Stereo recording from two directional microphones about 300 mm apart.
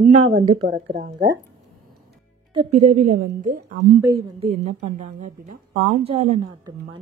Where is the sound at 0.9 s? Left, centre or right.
Right.